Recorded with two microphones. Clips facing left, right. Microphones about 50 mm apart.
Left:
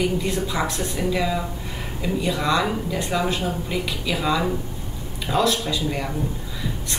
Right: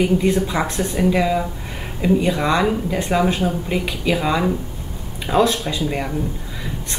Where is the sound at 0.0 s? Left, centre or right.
Right.